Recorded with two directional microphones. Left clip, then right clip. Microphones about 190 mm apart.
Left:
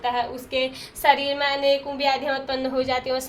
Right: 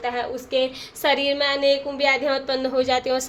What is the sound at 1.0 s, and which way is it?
Speech, 35° right (ahead or behind).